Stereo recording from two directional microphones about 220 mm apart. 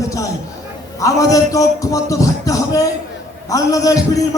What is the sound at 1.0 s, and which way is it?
Music, 15° left (ahead or behind).